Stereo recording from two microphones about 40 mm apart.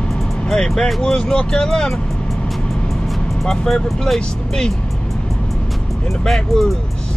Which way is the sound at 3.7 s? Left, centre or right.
Centre.